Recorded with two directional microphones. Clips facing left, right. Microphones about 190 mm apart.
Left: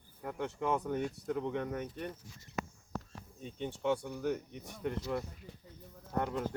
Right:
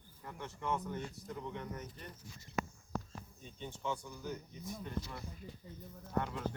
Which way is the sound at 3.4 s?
70° left (ahead or behind).